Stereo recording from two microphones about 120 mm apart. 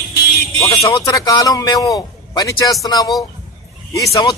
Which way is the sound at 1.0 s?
30° left (ahead or behind).